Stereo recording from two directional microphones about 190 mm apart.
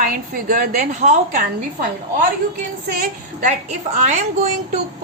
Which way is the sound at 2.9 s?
45° right (ahead or behind).